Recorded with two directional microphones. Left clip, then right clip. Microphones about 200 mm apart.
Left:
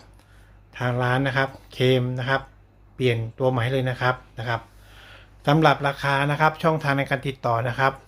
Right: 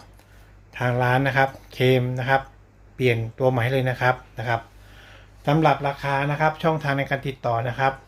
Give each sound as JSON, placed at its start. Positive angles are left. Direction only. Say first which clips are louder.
{"t": 0.7, "sound": "speech", "louder": "right 2 dB", "side_deg": 5}